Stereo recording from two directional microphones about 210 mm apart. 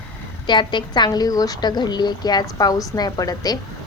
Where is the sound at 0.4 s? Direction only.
20° left (ahead or behind).